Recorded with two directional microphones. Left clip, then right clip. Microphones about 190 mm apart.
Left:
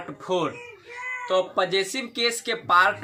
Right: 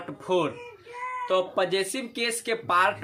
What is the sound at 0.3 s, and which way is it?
Speech, 15° right (ahead or behind).